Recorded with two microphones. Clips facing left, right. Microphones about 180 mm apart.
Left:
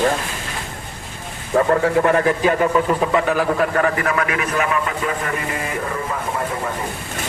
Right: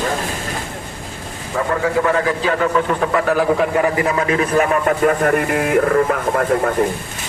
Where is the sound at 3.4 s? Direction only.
10° right (ahead or behind); by 6.7 s 65° right (ahead or behind).